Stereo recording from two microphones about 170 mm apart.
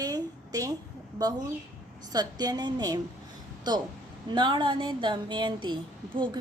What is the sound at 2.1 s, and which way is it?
Speech, 25° right (ahead or behind).